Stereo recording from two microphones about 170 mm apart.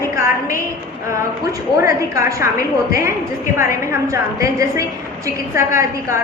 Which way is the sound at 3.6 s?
15° right (ahead or behind).